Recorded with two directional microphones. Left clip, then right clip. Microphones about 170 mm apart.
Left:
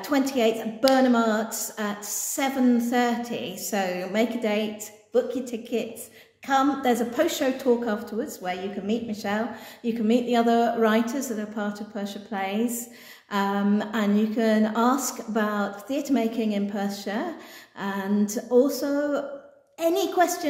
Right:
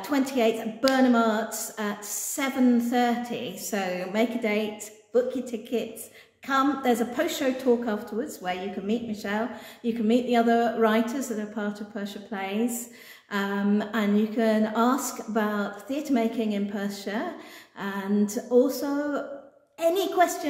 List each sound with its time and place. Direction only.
0.0 s a woman's voice: 15° left (ahead or behind)